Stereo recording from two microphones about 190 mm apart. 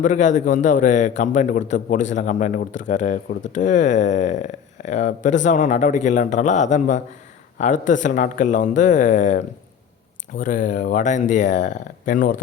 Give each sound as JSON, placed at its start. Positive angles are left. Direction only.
{"t": 0.0, "sound": "a man's voice", "side_deg": 40}